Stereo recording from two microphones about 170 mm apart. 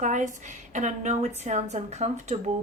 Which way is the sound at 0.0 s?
45° right (ahead or behind).